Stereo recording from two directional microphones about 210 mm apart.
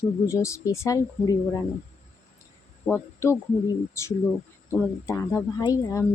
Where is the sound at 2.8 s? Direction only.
10° left (ahead or behind).